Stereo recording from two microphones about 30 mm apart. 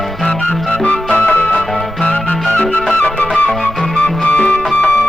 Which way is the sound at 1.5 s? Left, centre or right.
Left.